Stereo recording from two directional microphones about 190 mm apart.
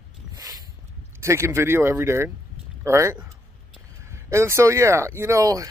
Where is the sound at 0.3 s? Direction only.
20° right (ahead or behind).